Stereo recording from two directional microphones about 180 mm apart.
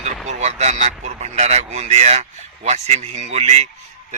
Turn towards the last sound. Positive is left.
turn(degrees=-40)  # may be behind; listen again after turning